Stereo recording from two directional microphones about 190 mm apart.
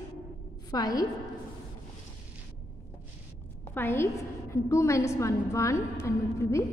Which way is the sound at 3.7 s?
10° left (ahead or behind).